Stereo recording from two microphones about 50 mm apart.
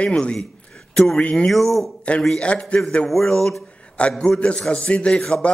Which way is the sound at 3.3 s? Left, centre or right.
Centre.